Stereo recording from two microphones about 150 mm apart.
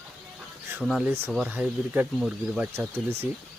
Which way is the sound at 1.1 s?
15° right (ahead or behind).